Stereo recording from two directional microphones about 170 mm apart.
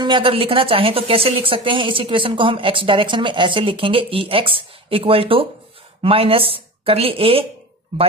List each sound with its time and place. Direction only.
0.0 s a woman's voice: 30° right (ahead or behind)